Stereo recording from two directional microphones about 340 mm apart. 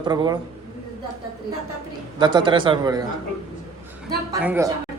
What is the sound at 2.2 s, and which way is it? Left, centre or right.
Speech, centre.